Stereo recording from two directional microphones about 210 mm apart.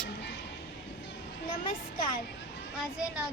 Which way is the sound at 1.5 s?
25° left (ahead or behind).